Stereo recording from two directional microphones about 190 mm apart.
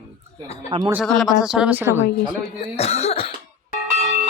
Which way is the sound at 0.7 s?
25° right (ahead or behind).